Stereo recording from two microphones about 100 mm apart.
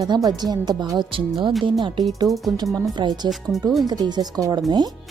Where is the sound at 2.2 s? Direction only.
Centre (ahead or behind).